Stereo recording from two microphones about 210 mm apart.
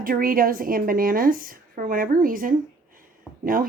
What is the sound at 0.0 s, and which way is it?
A woman's voice, 40° right (ahead or behind).